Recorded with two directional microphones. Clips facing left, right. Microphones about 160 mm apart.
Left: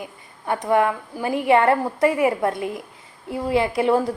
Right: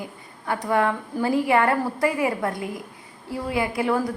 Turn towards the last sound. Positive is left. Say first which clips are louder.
# left 4 dB
turn(degrees=25)  # may be behind; listen again after turning